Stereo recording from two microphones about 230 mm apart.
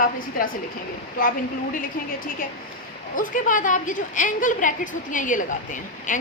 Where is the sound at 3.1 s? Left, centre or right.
Left.